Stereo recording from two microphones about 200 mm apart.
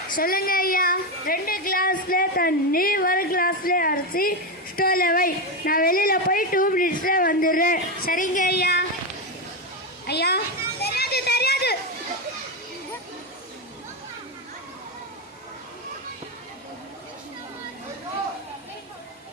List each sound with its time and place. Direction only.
0.2 s a woman's voice: 45° left (ahead or behind)
10.1 s a child's voice: 55° left (ahead or behind)
10.8 s children playing: 50° left (ahead or behind)